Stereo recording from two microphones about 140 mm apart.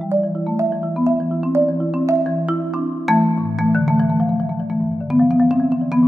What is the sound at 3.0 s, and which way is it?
Marimba, centre (ahead or behind).